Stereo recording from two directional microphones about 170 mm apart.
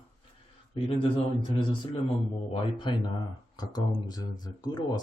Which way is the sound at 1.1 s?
30° left (ahead or behind).